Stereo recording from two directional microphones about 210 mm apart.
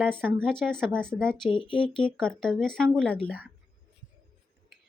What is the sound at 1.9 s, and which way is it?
Speech, 5° left (ahead or behind).